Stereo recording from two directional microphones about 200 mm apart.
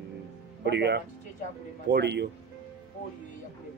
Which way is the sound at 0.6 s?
60° right (ahead or behind).